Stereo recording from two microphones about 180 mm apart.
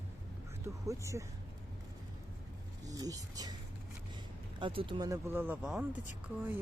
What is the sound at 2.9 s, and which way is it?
Speech, 20° right (ahead or behind).